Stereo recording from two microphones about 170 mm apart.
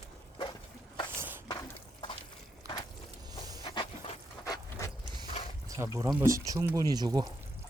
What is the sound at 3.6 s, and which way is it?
Dog, 30° left (ahead or behind).